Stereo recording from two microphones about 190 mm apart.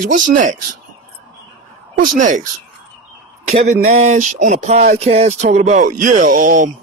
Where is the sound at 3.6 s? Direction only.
35° right (ahead or behind).